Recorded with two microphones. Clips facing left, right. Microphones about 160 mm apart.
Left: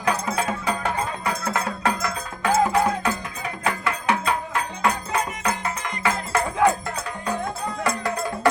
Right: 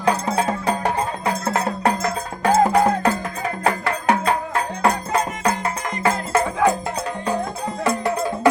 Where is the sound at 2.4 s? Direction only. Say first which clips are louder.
Right 4 dB; 45° right (ahead or behind).